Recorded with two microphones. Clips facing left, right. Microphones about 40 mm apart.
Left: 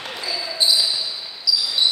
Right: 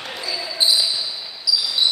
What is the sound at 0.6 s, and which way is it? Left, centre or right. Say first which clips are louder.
Basketball bounce: even; centre.